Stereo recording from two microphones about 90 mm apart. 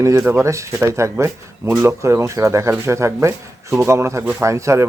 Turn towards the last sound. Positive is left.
turn(degrees=-35)  # may be behind; listen again after turning